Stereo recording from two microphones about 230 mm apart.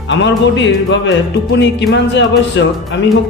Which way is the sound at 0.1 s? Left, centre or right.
Left.